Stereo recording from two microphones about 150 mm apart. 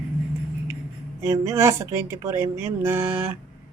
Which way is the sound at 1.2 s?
20° right (ahead or behind).